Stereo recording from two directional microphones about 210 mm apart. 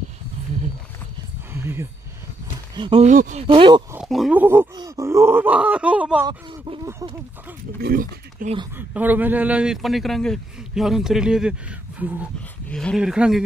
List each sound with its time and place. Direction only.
1.5 s a sound: 10° right (ahead or behind)
2.7 s speech: 25° right (ahead or behind)
3.4 s speech: 25° right (ahead or behind)
3.9 s groan: centre (ahead or behind)
6.2 s speech: 15° right (ahead or behind)
7.8 s speech: 40° right (ahead or behind)
8.7 s a man's voice: 10° right (ahead or behind)
12.0 s groan: 10° right (ahead or behind)
12.6 s a man's voice: 5° left (ahead or behind)